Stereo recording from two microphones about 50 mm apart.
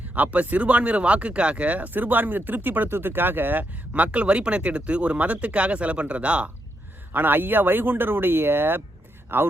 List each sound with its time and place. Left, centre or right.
0.1 s speech: right
7.1 s speech: right